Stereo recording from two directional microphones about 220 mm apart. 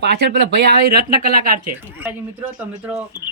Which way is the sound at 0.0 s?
50° right (ahead or behind).